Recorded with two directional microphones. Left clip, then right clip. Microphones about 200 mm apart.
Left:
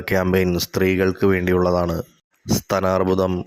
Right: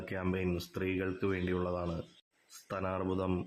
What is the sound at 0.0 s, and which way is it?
Speech, 40° left (ahead or behind).